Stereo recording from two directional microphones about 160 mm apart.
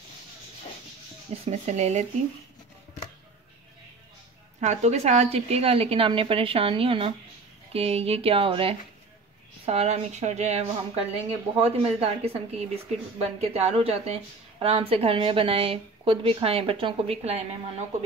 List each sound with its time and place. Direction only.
1.3 s speech: 40° right (ahead or behind)
4.6 s a woman's voice: 45° right (ahead or behind)